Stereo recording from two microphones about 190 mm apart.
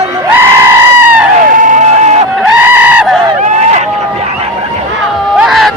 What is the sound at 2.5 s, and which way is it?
Goat, 10° right (ahead or behind).